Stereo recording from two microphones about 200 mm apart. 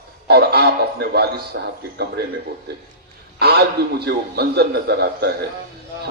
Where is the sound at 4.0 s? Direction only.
55° right (ahead or behind).